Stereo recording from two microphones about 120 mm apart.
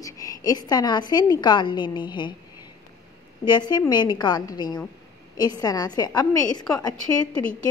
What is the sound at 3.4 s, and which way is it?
A woman's voice, 35° left (ahead or behind).